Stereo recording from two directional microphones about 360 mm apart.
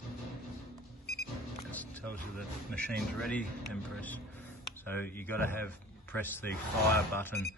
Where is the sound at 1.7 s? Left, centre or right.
Centre.